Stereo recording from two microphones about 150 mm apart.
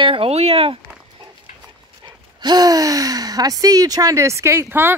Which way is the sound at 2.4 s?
25° right (ahead or behind).